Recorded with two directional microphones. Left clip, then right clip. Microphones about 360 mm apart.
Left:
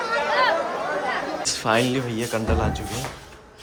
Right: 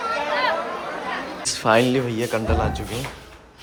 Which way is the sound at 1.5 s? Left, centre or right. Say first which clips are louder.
Right 5 dB; centre.